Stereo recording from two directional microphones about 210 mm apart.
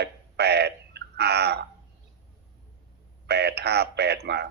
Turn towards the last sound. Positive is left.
turn(degrees=-50)  # may be behind; listen again after turning